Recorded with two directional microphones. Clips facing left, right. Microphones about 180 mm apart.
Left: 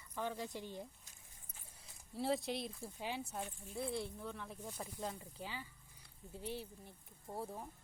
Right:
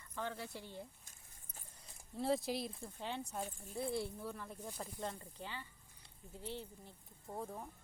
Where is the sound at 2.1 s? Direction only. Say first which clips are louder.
Right 1 dB; centre (ahead or behind).